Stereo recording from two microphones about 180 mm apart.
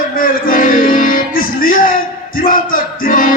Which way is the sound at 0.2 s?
50° left (ahead or behind).